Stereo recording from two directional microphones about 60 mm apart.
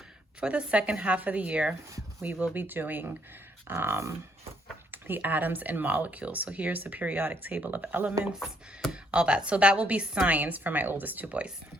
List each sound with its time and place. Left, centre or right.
0.3 s speech: centre
8.9 s speech: centre